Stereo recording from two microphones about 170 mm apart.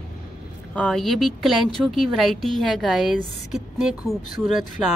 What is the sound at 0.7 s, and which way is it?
Speech, centre (ahead or behind).